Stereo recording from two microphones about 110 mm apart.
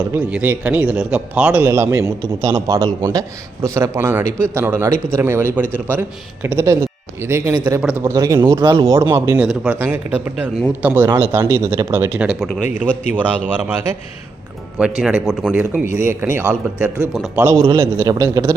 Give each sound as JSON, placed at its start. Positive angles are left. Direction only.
{"t": 0.1, "sound": "a man's voice", "side_deg": -10}
{"t": 1.7, "sound": "a man's voice", "side_deg": -25}
{"t": 7.8, "sound": "a man's voice", "side_deg": -10}
{"t": 8.0, "sound": "a man's voice", "side_deg": -35}
{"t": 8.6, "sound": "a man's voice", "side_deg": -35}
{"t": 9.0, "sound": "a man's voice", "side_deg": -20}
{"t": 14.8, "sound": "a man's voice", "side_deg": -5}
{"t": 15.9, "sound": "a man's voice", "side_deg": -20}